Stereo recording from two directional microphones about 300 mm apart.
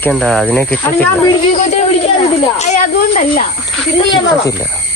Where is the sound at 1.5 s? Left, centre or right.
Left.